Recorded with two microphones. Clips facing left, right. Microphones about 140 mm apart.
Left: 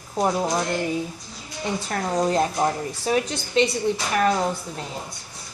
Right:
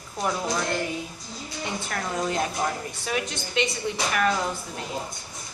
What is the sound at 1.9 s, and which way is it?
A woman's voice, 35° left (ahead or behind).